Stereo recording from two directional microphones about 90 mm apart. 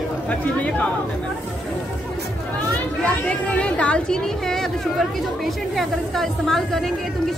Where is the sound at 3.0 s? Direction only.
15° left (ahead or behind).